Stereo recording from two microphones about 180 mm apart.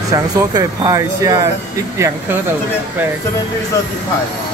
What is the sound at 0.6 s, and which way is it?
Speech, 20° right (ahead or behind).